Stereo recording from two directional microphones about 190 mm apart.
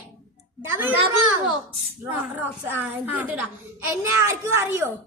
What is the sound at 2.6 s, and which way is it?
A child's voice, 10° right (ahead or behind).